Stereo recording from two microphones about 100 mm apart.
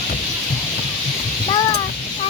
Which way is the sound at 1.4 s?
50° left (ahead or behind).